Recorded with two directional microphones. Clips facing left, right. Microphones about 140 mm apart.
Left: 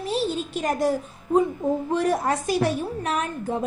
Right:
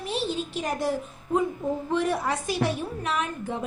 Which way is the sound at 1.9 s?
40° left (ahead or behind).